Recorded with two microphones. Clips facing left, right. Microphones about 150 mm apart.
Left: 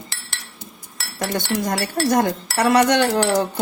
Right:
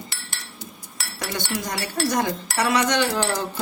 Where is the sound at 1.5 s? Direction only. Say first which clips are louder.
Left 6 dB; 50° left (ahead or behind).